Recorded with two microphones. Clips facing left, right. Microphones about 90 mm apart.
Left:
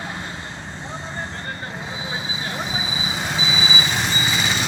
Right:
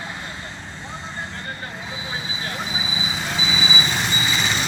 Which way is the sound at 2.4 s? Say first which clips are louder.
Left 1 dB; 20° left (ahead or behind).